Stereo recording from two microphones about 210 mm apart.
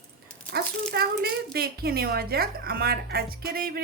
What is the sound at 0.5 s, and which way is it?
A child's voice, 50° right (ahead or behind).